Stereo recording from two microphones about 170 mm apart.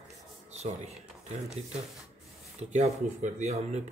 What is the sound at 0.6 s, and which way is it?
Speech, 40° right (ahead or behind).